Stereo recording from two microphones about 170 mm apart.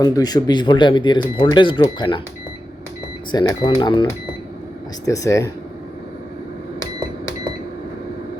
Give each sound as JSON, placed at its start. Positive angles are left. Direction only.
{"t": 0.0, "sound": "speech", "side_deg": 25}
{"t": 3.3, "sound": "speech", "side_deg": 25}
{"t": 5.0, "sound": "speech", "side_deg": 20}